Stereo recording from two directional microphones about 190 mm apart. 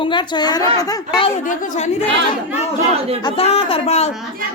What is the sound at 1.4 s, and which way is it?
Speech, 45° left (ahead or behind).